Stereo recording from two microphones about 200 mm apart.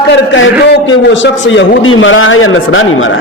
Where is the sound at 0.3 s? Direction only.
70° left (ahead or behind).